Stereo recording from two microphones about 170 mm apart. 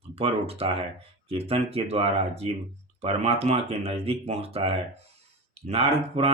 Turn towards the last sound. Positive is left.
turn(degrees=-35)  # may be behind; listen again after turning